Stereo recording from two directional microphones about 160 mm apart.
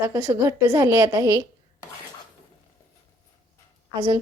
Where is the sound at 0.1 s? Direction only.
15° right (ahead or behind).